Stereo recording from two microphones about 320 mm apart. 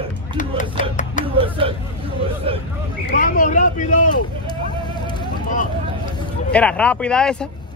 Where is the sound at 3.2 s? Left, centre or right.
Left.